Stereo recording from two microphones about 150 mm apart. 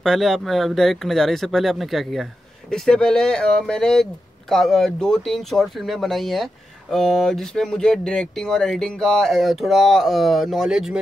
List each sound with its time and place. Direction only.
0.0 s speech: centre (ahead or behind)